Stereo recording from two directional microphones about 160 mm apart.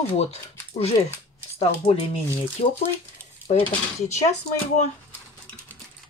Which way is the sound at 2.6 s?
35° left (ahead or behind).